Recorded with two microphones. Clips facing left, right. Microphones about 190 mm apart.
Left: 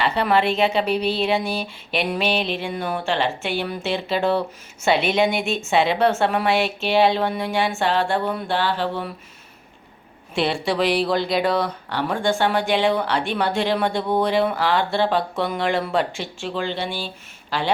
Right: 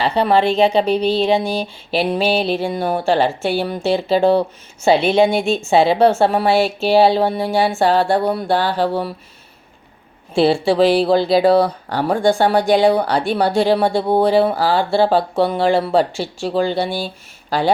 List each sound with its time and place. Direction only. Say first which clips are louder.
0.0 s speech: right 4 dB; 30° right (ahead or behind)
10.3 s speech: right 8 dB; 30° right (ahead or behind)